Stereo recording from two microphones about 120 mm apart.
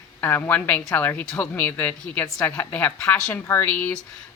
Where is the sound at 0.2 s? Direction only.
15° left (ahead or behind).